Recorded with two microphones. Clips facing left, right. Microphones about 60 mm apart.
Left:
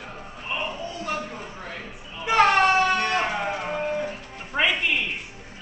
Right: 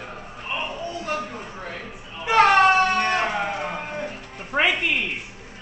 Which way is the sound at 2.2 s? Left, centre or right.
Centre.